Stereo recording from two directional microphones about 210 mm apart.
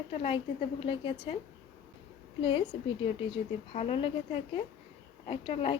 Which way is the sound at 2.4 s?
25° left (ahead or behind).